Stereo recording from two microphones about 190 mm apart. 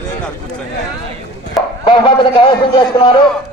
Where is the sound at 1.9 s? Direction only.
25° left (ahead or behind).